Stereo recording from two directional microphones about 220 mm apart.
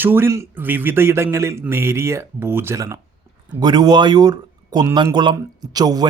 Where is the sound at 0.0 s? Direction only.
10° right (ahead or behind).